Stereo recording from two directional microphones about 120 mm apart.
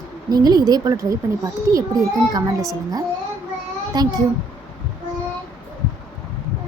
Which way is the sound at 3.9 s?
35° right (ahead or behind).